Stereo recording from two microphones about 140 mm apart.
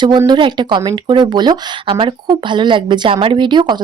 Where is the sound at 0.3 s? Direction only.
35° right (ahead or behind).